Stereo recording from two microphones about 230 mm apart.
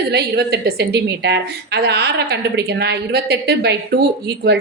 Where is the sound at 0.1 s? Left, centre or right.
Right.